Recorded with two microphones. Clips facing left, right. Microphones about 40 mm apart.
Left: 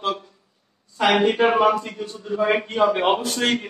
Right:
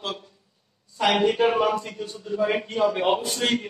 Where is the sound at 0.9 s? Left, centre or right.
Left.